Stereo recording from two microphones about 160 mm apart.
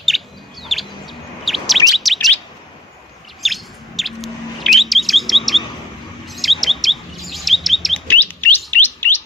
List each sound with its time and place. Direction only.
0.1 s bird: centre (ahead or behind)
0.6 s chirp: centre (ahead or behind)
1.9 s chirp tone: centre (ahead or behind)
3.4 s bird: centre (ahead or behind)
6.2 s chirp: centre (ahead or behind)
8.1 s chirp: 10° left (ahead or behind)